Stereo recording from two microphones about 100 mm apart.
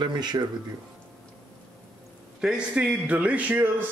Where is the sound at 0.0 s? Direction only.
45° right (ahead or behind).